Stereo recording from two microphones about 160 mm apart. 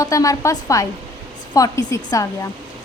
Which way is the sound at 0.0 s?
20° left (ahead or behind).